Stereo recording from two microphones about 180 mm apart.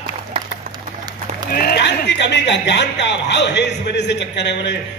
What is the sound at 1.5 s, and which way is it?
Speech, 60° left (ahead or behind).